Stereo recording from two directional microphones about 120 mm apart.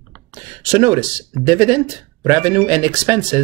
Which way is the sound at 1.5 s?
20° right (ahead or behind).